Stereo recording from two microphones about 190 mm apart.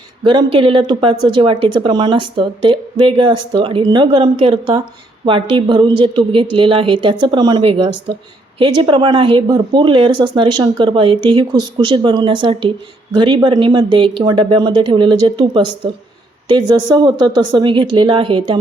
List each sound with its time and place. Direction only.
0.3 s speech: 25° right (ahead or behind)